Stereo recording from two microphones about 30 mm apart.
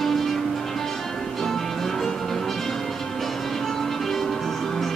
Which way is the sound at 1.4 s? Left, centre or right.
Centre.